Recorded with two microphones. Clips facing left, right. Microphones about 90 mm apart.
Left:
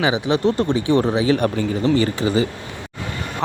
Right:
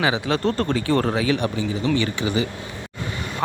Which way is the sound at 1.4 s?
45° left (ahead or behind).